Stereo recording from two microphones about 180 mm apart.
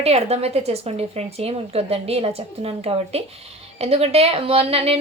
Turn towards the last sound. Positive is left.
turn(degrees=-35)  # may be behind; listen again after turning